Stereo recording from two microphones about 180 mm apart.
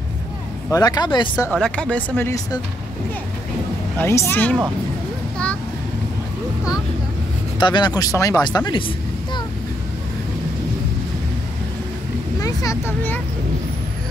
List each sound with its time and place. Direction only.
0.7 s speech: 20° left (ahead or behind)
1.5 s speech: 5° left (ahead or behind)
4.0 s speech: 15° left (ahead or behind)
7.5 s speech: 25° left (ahead or behind)
12.4 s speech: 20° left (ahead or behind)